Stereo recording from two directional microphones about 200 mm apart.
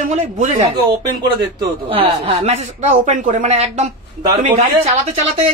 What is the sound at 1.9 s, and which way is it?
Speech, 30° right (ahead or behind).